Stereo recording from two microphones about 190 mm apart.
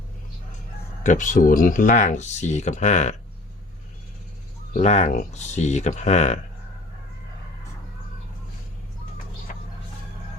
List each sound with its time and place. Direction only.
1.0 s speech: 40° left (ahead or behind)
4.7 s speech: 35° left (ahead or behind)